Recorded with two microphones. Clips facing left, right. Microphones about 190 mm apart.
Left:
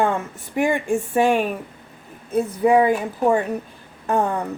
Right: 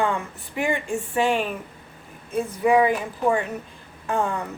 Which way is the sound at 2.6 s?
35° left (ahead or behind).